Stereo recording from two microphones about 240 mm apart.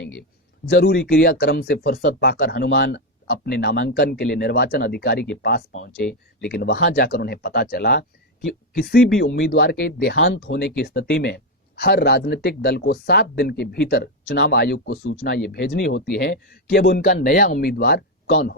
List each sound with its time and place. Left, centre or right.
0.6 s speech: left
6.0 s speech: centre
6.5 s speech: left